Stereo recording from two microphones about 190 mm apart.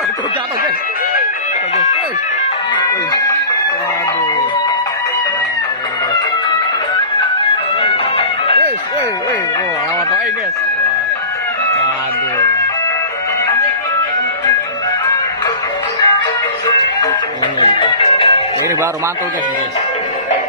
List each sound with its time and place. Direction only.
7.8 s music: 30° left (ahead or behind)
17.6 s music: 25° left (ahead or behind)